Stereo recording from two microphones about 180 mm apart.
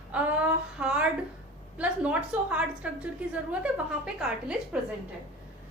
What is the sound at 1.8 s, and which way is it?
A woman's voice, 5° right (ahead or behind).